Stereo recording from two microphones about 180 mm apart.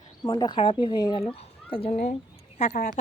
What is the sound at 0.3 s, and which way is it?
Speech, 25° left (ahead or behind).